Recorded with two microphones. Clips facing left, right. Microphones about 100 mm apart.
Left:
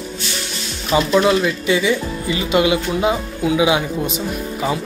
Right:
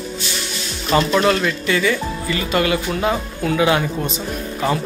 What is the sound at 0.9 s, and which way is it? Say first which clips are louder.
Speech: left 1 dB; 10° left (ahead or behind).